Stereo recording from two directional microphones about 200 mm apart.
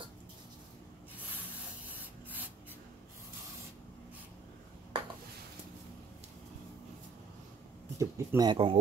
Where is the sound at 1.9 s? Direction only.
10° right (ahead or behind).